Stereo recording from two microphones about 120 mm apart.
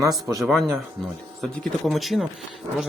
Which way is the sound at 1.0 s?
Centre (ahead or behind).